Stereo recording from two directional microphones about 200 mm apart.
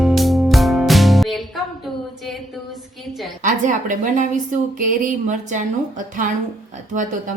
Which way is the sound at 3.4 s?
40° right (ahead or behind).